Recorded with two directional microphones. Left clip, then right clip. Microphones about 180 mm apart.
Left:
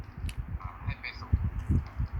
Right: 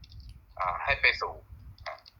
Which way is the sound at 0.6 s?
65° right (ahead or behind).